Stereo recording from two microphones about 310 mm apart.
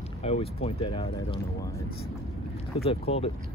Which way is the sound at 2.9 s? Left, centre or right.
Centre.